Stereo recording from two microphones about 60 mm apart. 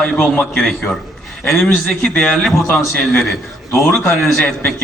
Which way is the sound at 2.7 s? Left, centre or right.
Left.